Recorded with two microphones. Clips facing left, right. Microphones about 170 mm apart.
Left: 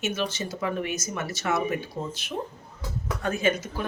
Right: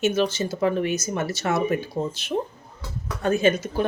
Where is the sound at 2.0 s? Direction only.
50° right (ahead or behind).